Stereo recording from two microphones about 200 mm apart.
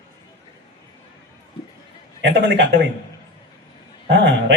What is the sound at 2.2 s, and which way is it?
Speech, 60° right (ahead or behind).